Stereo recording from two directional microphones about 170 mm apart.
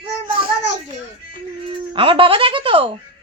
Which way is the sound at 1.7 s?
30° right (ahead or behind).